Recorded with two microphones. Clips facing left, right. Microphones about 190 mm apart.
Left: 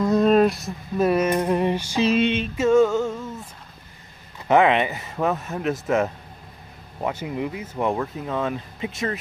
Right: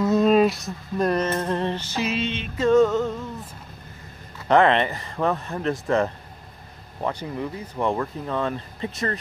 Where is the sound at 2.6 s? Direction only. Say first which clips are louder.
Even; 5° left (ahead or behind).